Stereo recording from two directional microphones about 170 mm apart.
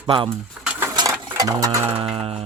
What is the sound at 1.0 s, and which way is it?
Sewing machine, 20° right (ahead or behind).